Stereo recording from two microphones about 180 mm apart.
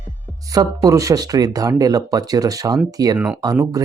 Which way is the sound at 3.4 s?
20° right (ahead or behind).